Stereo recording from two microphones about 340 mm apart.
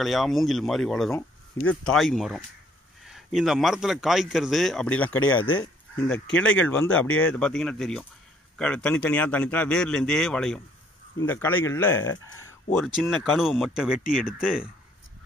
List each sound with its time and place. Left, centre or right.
0.0 s speech: centre
12.1 s speech: left
12.6 s speech: centre